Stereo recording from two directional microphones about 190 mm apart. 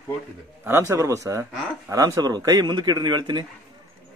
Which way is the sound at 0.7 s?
15° right (ahead or behind).